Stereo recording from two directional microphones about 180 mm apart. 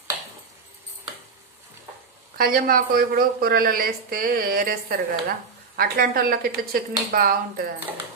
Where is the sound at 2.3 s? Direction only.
55° right (ahead or behind).